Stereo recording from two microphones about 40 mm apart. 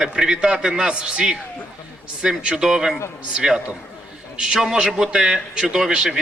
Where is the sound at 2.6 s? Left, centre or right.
Centre.